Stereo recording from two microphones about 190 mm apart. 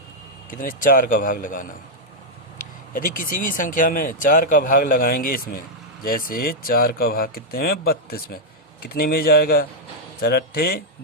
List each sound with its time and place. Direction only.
0.6 s speech: 45° left (ahead or behind)
2.9 s speech: 45° left (ahead or behind)